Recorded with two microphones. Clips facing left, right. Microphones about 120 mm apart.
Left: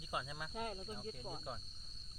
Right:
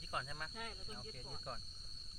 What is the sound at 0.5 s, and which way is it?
Speech, 35° left (ahead or behind).